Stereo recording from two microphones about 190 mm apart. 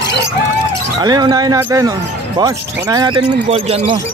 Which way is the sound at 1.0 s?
20° right (ahead or behind).